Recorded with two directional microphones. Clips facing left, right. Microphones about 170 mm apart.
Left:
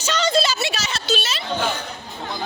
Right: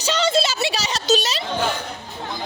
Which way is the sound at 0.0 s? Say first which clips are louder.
Even; 30° right (ahead or behind).